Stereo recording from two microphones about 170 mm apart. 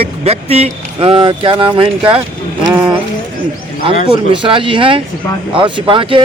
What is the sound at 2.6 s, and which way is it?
Speech, 10° right (ahead or behind).